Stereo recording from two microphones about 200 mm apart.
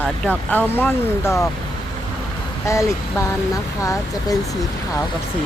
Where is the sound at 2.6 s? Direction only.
15° left (ahead or behind).